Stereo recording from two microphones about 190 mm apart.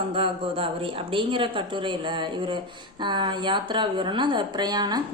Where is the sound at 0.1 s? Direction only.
30° right (ahead or behind).